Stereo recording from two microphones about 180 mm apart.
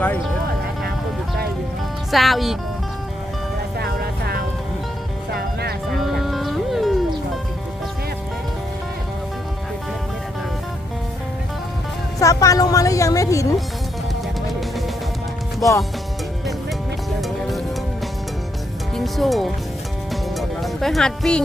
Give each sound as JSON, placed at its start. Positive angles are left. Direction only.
{"t": 2.0, "sound": "speech", "side_deg": 0}
{"t": 3.8, "sound": "music", "side_deg": -60}
{"t": 5.9, "sound": "music", "side_deg": 0}
{"t": 12.2, "sound": "a woman's voice", "side_deg": 20}
{"t": 18.9, "sound": "speech", "side_deg": 0}
{"t": 20.6, "sound": "speech", "side_deg": 0}